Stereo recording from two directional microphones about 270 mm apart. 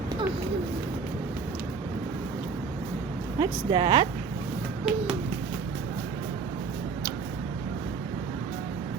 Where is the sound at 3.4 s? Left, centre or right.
Centre.